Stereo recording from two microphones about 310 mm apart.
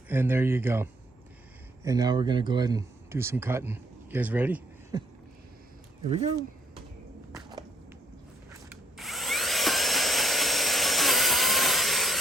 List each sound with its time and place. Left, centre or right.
0.1 s speech: centre
6.1 s speech: right
8.5 s vacuum cleaner: centre